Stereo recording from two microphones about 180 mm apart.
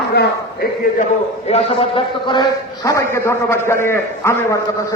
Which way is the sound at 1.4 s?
35° left (ahead or behind).